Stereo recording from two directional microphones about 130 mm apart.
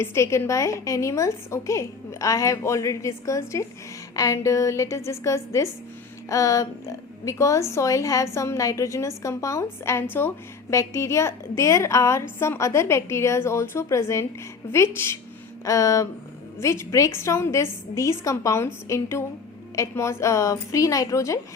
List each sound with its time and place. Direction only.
0.0 s speech: 20° left (ahead or behind)